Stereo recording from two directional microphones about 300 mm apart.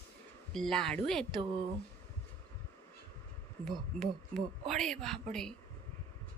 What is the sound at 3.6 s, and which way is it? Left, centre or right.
A woman's voice, centre.